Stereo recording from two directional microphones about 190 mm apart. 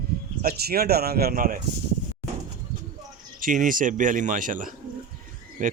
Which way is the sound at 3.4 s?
45° right (ahead or behind).